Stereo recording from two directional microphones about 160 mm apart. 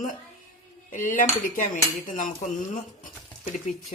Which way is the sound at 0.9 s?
55° left (ahead or behind).